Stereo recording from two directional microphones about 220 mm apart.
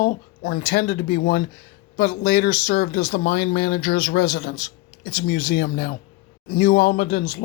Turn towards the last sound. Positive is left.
turn(degrees=40)  # may be behind; listen again after turning